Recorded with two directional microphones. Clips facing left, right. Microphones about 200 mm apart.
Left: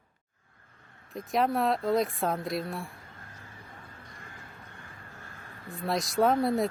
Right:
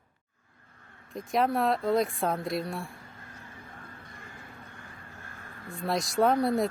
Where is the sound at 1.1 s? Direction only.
Centre (ahead or behind).